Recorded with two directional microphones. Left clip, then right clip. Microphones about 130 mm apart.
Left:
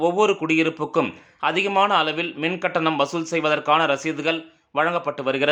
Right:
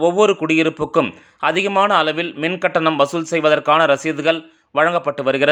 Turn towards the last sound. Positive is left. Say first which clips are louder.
# right 5 dB
turn(degrees=-35)  # may be behind; listen again after turning